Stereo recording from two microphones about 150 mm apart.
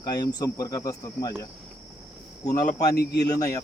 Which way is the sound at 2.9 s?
90° left.